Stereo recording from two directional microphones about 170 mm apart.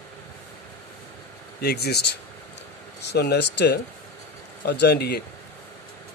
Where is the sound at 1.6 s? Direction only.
70° left (ahead or behind).